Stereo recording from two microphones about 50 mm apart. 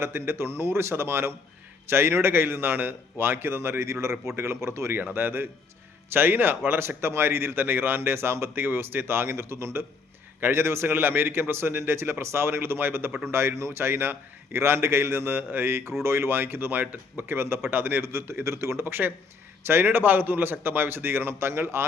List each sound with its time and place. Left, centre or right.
0.0 s a man's voice: right
4.4 s speech: right
5.1 s speech: right
6.7 s a man's voice: right
17.2 s a man's voice: right
17.7 s a man's voice: right
18.9 s speech: right